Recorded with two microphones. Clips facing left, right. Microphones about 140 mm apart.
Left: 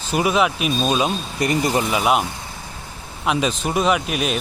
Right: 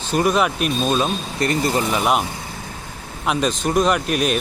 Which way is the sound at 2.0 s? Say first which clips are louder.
Left 1 dB; centre (ahead or behind).